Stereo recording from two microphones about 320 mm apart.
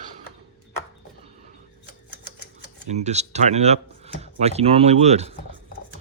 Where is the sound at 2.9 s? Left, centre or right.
Right.